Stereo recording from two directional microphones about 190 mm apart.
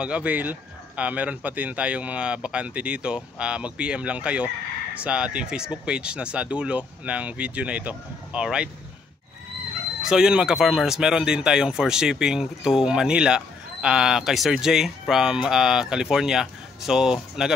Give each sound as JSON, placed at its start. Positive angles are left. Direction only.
{"t": 0.0, "sound": "speech", "side_deg": -5}
{"t": 10.0, "sound": "speech", "side_deg": -5}